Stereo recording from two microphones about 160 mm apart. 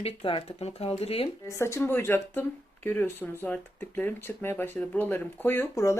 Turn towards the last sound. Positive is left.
turn(degrees=20)  # may be behind; listen again after turning